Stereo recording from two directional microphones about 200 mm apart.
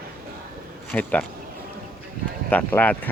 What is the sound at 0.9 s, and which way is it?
Speech, 10° left (ahead or behind).